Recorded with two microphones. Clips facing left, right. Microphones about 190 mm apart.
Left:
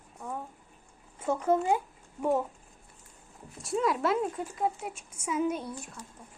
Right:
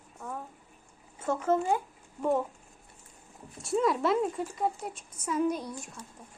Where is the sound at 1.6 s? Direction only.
15° left (ahead or behind).